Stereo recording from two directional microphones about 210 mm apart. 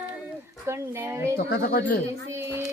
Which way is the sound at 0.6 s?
15° right (ahead or behind).